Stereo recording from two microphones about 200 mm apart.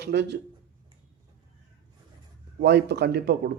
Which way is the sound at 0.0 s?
55° right (ahead or behind).